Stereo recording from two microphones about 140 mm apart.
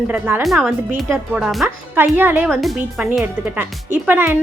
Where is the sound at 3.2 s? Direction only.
15° right (ahead or behind).